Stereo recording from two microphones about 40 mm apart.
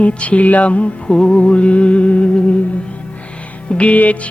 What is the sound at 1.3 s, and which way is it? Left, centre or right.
Speech, left.